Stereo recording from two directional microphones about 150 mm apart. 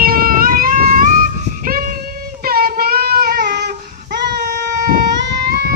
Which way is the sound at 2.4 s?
85° right.